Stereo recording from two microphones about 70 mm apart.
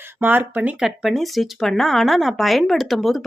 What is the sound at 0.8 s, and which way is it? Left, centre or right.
Speech, centre.